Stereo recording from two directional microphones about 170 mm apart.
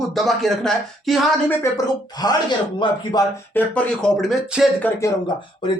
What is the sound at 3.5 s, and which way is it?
Speech, 10° left (ahead or behind).